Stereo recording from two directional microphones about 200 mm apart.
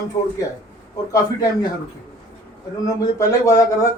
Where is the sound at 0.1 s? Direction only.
15° left (ahead or behind).